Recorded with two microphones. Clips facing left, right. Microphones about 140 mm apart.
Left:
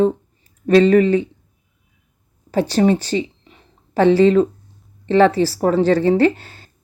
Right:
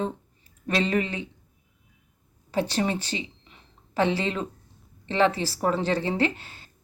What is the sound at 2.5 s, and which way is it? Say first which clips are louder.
Speech: left 10 dB; 40° left (ahead or behind).